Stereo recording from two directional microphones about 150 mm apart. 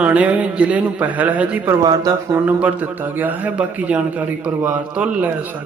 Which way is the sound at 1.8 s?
25° right (ahead or behind).